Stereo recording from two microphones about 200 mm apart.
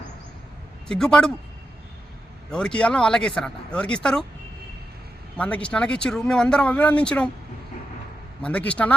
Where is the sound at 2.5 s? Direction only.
5° left (ahead or behind).